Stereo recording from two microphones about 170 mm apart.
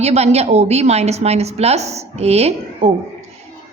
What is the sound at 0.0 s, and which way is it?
A woman's voice, 40° right (ahead or behind).